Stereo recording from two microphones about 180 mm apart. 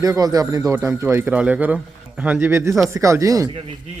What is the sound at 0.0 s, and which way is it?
Speech, 20° right (ahead or behind).